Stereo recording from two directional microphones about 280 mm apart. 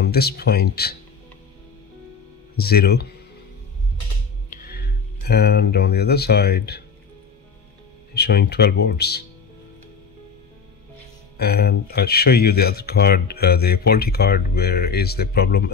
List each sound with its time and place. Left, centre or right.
0.0 s speech: left
2.5 s speech: left
4.5 s speech: left
8.1 s speech: left
11.3 s speech: left